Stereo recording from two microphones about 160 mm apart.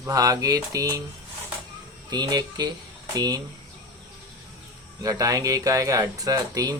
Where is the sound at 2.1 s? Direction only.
25° right (ahead or behind).